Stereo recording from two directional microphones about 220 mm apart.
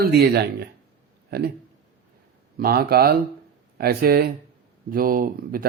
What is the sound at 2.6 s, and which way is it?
A man's voice, 45° right (ahead or behind).